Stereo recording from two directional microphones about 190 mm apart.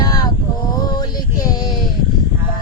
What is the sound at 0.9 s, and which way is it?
Female singing, 20° left (ahead or behind).